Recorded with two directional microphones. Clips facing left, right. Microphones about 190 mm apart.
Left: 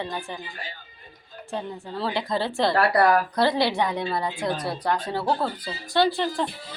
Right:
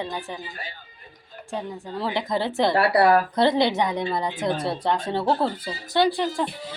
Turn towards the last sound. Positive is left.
turn(degrees=-10)  # may be behind; listen again after turning